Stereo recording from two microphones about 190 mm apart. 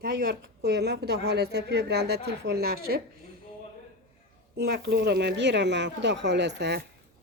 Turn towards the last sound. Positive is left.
turn(degrees=-65)  # may be behind; listen again after turning